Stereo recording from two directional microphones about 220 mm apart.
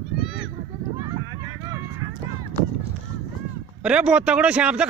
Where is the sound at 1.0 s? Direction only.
15° right (ahead or behind).